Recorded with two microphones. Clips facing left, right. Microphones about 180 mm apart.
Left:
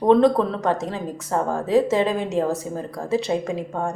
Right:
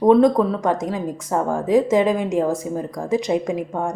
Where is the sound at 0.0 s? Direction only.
10° right (ahead or behind).